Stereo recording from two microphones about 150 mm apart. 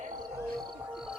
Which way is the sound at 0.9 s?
5° right (ahead or behind).